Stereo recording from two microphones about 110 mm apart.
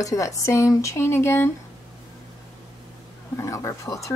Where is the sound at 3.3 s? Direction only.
25° left (ahead or behind).